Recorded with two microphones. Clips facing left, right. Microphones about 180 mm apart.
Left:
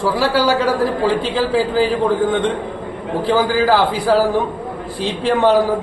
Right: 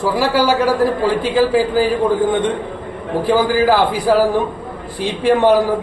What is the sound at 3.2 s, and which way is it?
A man's voice, 10° right (ahead or behind).